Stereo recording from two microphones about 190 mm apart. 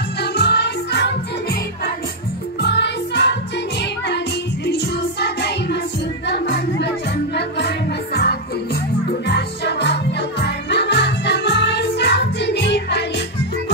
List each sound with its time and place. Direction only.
0.2 s music: 60° left (ahead or behind)
2.6 s music: 65° left (ahead or behind)
4.6 s music: 65° left (ahead or behind)